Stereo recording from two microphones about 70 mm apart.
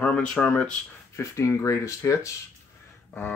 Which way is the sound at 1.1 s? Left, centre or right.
Left.